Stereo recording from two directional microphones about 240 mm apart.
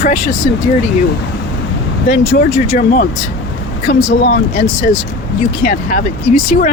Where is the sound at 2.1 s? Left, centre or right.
Left.